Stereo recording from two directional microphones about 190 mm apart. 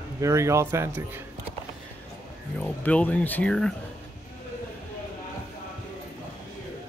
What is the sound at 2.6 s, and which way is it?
Speech, 10° left (ahead or behind).